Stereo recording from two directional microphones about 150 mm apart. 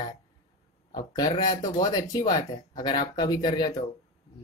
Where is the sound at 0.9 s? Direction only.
25° left (ahead or behind).